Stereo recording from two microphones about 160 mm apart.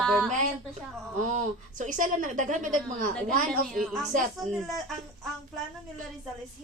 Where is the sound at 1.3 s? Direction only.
50° right (ahead or behind).